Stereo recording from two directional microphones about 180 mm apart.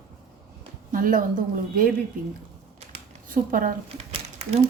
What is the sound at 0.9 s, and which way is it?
Speech, 50° right (ahead or behind).